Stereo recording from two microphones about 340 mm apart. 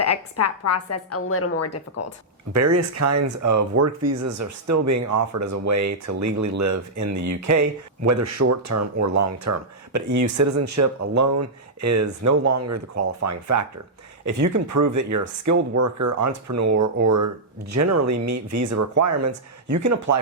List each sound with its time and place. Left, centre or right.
0.3 s a woman's voice: left
2.5 s speech: right